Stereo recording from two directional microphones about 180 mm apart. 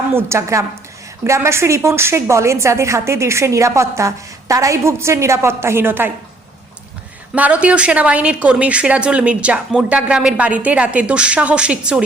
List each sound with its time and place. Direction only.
0.1 s a woman's voice: 15° right (ahead or behind)
7.3 s a woman's voice: 10° right (ahead or behind)